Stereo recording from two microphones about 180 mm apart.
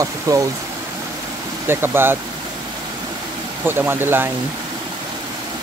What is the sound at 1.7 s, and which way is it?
Speech, 10° right (ahead or behind).